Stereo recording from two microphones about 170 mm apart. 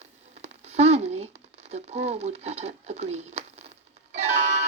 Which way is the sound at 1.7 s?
40° right (ahead or behind).